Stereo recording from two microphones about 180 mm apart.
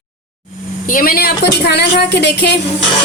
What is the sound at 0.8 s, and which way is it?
A woman's voice, 50° left (ahead or behind).